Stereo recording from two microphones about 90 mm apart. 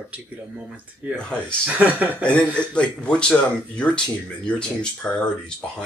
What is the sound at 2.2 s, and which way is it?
Speech, 10° left (ahead or behind).